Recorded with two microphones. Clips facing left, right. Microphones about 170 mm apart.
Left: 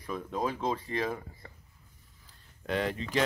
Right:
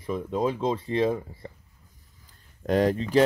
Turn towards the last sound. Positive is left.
turn(degrees=-40)  # may be behind; listen again after turning